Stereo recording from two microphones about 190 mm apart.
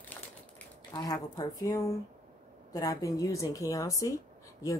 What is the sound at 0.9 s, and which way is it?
Speech, 20° left (ahead or behind).